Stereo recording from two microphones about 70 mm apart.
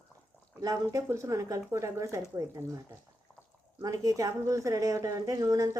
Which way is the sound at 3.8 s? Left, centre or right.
Right.